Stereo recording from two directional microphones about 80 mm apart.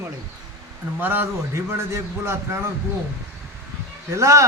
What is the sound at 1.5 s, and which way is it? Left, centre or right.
A man's voice, right.